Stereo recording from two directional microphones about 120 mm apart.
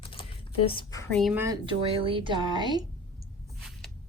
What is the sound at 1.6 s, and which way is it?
Speech, 45° right (ahead or behind).